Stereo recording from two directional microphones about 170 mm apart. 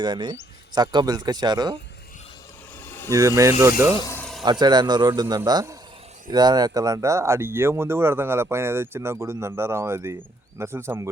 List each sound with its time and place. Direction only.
0.0 s speech: 25° right (ahead or behind)
2.8 s vehicle: 10° left (ahead or behind)
3.1 s speech: 15° right (ahead or behind)
4.1 s a sound: 5° left (ahead or behind)
4.6 s speech: 25° right (ahead or behind)